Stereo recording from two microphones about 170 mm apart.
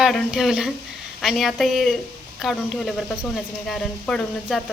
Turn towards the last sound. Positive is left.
turn(degrees=0)  # may be behind; listen again after turning